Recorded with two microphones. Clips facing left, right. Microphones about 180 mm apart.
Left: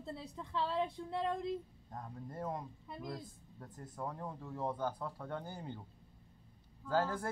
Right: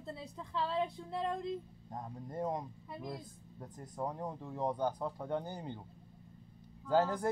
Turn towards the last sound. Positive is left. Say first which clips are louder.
# right 4 dB
turn(degrees=-15)  # may be behind; listen again after turning